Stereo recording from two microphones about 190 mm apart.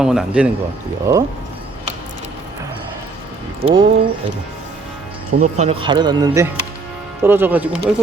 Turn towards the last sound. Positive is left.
turn(degrees=-10)  # may be behind; listen again after turning